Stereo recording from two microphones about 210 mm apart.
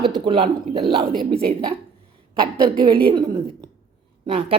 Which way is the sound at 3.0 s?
20° right (ahead or behind).